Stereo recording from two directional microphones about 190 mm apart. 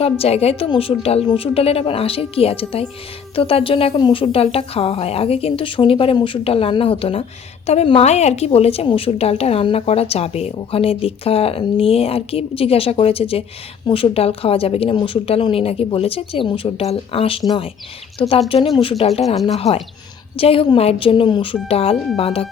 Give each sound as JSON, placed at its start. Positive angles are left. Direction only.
{"t": 0.0, "sound": "a woman's voice", "side_deg": 30}